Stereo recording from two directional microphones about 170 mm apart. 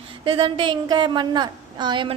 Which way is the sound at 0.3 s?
30° right (ahead or behind).